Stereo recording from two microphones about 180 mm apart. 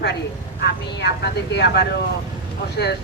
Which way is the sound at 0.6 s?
70° left (ahead or behind).